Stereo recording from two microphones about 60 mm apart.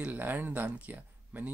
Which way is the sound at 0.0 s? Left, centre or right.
Right.